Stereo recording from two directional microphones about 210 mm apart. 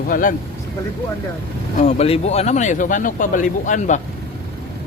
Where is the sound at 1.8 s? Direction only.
30° left (ahead or behind).